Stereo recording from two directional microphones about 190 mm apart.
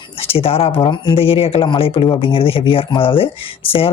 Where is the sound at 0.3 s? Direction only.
30° left (ahead or behind).